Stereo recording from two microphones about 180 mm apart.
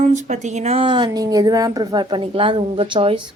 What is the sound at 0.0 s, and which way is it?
Speech, 40° right (ahead or behind).